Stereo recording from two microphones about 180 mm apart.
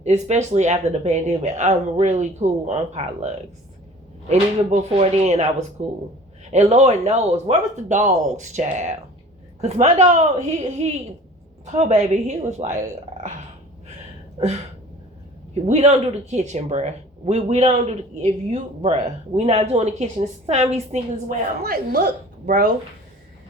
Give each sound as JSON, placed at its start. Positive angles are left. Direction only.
{"t": 0.0, "sound": "speech", "side_deg": -40}
{"t": 15.6, "sound": "speech", "side_deg": -35}
{"t": 21.6, "sound": "a woman's voice", "side_deg": -60}